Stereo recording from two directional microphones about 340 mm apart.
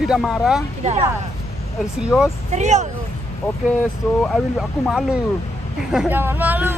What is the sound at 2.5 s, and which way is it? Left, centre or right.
Speech, right.